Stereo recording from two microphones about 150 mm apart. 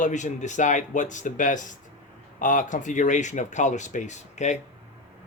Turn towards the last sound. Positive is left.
turn(degrees=50)  # may be behind; listen again after turning